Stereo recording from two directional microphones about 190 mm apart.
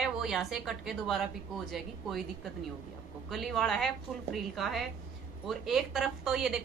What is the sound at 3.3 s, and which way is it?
A woman's voice, centre (ahead or behind).